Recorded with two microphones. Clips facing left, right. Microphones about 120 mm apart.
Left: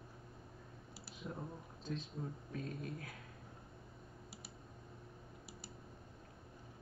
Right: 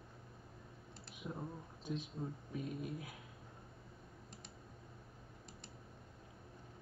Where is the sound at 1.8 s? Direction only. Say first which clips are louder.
Right 1 dB; 15° right (ahead or behind).